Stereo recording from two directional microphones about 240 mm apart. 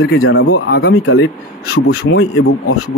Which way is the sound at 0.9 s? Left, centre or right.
Left.